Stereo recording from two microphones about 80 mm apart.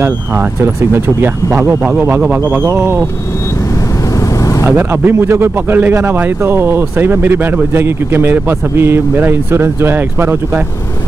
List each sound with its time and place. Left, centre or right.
0.9 s speech: right
2.6 s speech: right
4.6 s speech: right